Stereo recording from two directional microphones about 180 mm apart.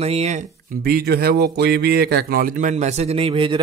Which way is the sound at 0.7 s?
60° right (ahead or behind).